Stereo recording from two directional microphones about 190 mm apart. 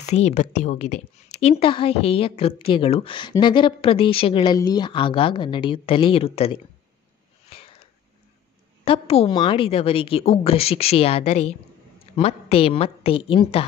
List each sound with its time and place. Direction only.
0.0 s a woman's voice: 35° left (ahead or behind)
7.4 s a sound: 30° left (ahead or behind)
8.8 s a woman's voice: 30° left (ahead or behind)